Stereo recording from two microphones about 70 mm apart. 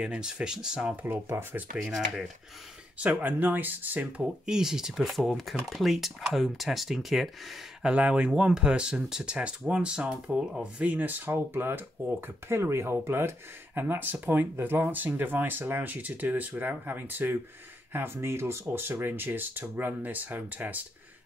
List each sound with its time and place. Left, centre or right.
0.0 s speech: centre
3.0 s speech: right
4.2 s speech: centre
7.8 s speech: centre